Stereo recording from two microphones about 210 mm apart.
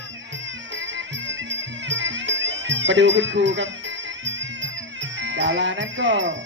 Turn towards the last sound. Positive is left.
turn(degrees=-60)  # may be behind; listen again after turning